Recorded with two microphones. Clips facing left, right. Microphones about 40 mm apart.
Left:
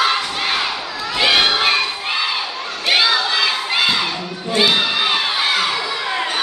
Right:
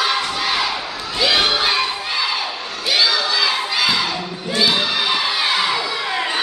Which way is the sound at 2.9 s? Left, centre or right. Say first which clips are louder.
Left 2 dB; left.